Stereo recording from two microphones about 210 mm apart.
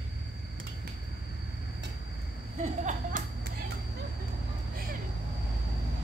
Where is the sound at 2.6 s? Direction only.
35° right (ahead or behind).